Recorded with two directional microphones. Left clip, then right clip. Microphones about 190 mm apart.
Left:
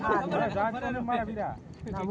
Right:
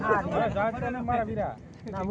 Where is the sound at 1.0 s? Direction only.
45° right (ahead or behind).